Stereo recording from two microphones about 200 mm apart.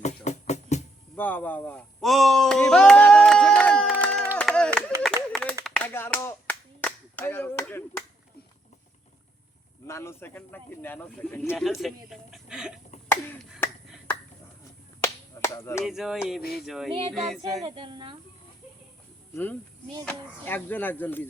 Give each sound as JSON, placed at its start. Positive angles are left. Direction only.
{"t": 0.0, "sound": "music", "side_deg": 35}
{"t": 1.1, "sound": "speech", "side_deg": 10}
{"t": 4.4, "sound": "clapping", "side_deg": 5}
{"t": 9.8, "sound": "speech", "side_deg": 15}
{"t": 13.1, "sound": "finger snapping", "side_deg": 10}
{"t": 15.0, "sound": "finger snapping", "side_deg": 15}
{"t": 15.8, "sound": "a sound", "side_deg": 0}
{"t": 16.4, "sound": "a sound", "side_deg": 50}
{"t": 16.6, "sound": "a sound", "side_deg": 0}
{"t": 17.6, "sound": "a woman's voice", "side_deg": -25}
{"t": 19.3, "sound": "speech", "side_deg": 10}